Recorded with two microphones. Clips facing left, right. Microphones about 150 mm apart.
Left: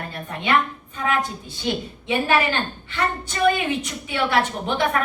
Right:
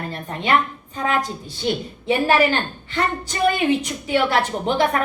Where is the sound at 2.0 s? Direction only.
35° right (ahead or behind).